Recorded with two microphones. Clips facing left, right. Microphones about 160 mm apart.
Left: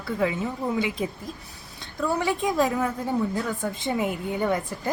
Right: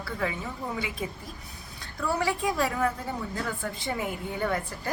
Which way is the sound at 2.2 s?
20° left (ahead or behind).